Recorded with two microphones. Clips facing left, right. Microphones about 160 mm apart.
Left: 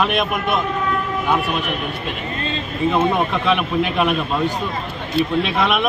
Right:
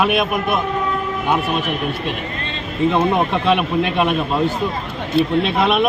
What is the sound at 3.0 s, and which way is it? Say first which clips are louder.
Speech: right 1 dB; 30° right (ahead or behind).